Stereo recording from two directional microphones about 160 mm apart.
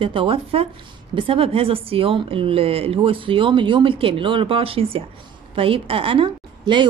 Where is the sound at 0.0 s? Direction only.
35° right (ahead or behind).